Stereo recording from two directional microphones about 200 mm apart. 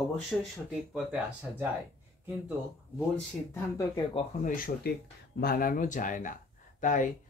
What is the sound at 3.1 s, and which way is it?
Speech, 15° left (ahead or behind).